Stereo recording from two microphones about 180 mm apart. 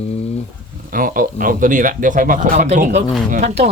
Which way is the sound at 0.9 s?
50° right (ahead or behind).